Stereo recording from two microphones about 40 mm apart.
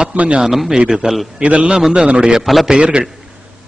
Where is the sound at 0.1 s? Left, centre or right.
Right.